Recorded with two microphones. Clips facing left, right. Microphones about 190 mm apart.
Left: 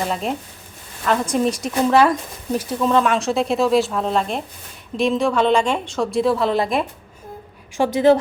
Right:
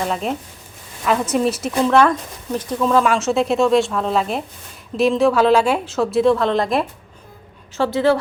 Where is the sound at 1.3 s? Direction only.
5° right (ahead or behind).